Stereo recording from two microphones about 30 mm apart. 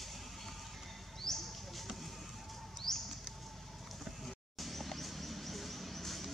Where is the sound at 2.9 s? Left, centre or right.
Centre.